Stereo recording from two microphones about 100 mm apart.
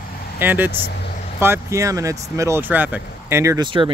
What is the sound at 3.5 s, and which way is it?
Speech, 55° right (ahead or behind).